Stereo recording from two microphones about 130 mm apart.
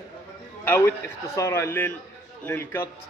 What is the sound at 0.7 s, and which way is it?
A man's voice, 20° left (ahead or behind).